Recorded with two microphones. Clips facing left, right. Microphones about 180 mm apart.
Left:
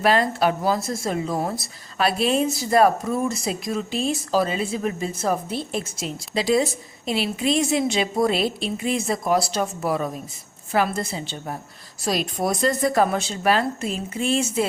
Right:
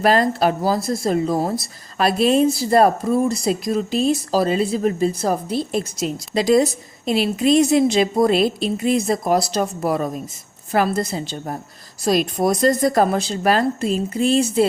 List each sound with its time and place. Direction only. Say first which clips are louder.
0.0 s speech: right 3 dB; 40° right (ahead or behind)